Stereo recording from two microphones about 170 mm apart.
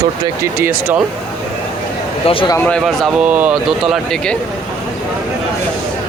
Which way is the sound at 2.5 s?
10° left (ahead or behind).